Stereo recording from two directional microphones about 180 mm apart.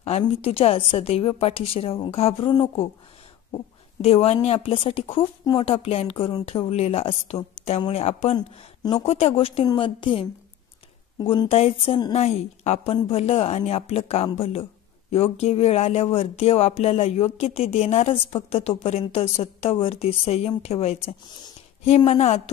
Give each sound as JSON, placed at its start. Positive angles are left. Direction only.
{"t": 0.0, "sound": "a woman's voice", "side_deg": 35}
{"t": 8.4, "sound": "speech", "side_deg": 20}
{"t": 9.0, "sound": "a woman's voice", "side_deg": 35}
{"t": 11.4, "sound": "a woman's voice", "side_deg": 35}
{"t": 21.3, "sound": "a sound", "side_deg": 25}
{"t": 21.9, "sound": "a woman's voice", "side_deg": 35}